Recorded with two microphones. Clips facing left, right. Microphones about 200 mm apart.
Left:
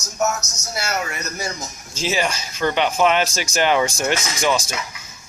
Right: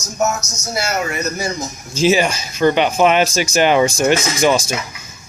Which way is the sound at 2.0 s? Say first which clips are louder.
Right 8 dB; 10° right (ahead or behind).